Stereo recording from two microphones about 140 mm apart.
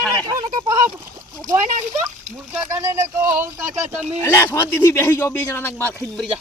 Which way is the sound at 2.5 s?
15° right (ahead or behind).